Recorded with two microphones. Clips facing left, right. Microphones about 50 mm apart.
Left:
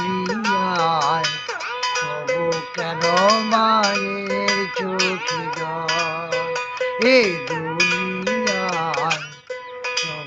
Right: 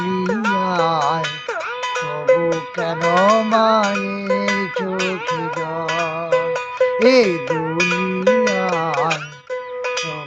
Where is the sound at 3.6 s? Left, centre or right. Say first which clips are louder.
Right 2 dB; centre.